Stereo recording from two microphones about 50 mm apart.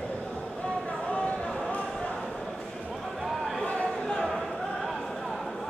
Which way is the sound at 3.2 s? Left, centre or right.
Centre.